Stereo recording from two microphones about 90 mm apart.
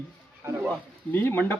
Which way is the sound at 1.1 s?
20° left (ahead or behind).